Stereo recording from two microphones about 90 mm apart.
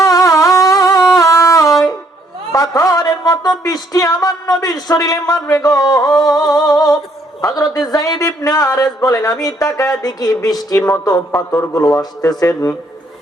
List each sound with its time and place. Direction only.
0.0 s music: 40° left (ahead or behind)
2.5 s a man's voice: 40° left (ahead or behind)